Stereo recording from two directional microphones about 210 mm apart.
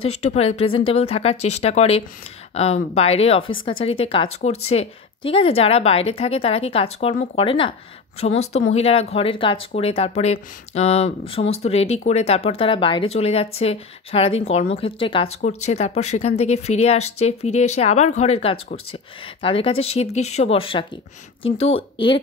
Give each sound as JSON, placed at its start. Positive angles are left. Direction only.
{"t": 0.2, "sound": "speech", "side_deg": 30}
{"t": 8.7, "sound": "speech", "side_deg": 30}